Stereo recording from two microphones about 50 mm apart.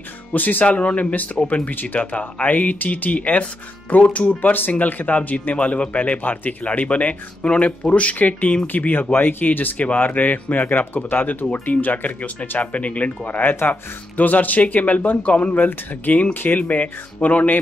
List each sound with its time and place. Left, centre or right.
0.3 s speech: left
4.3 s speech: left